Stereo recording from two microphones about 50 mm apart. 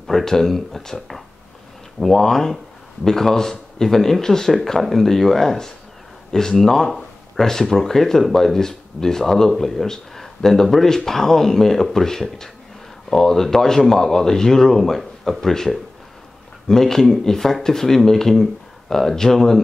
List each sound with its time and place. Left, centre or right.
0.0 s speech: centre